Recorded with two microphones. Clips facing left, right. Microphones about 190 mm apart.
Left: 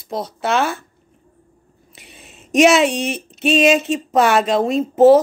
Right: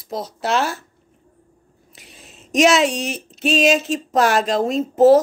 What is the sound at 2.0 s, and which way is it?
Speech, centre (ahead or behind).